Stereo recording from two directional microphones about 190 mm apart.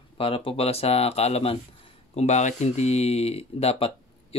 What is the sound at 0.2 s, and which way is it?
Speech, 30° left (ahead or behind).